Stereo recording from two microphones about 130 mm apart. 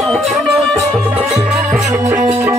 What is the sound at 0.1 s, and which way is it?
Music, 5° left (ahead or behind).